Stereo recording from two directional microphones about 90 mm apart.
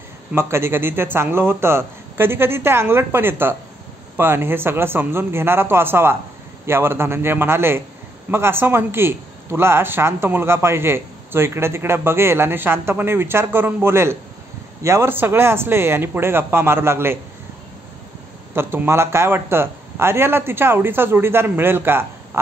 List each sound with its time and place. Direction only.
0.3 s speech: 30° right (ahead or behind)
18.5 s speech: 25° right (ahead or behind)